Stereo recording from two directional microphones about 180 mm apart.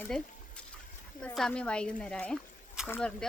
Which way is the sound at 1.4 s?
5° left (ahead or behind).